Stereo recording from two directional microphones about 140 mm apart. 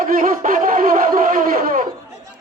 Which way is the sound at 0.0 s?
80° right.